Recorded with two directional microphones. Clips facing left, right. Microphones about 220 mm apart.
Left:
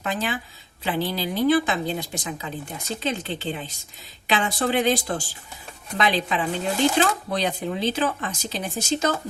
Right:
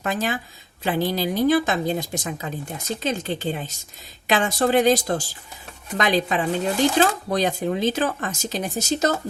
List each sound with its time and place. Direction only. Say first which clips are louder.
0.0 s speech: right 2 dB; 45° right (ahead or behind)